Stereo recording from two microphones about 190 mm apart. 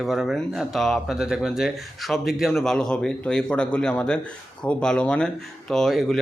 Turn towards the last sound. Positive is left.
turn(degrees=0)  # may be behind; listen again after turning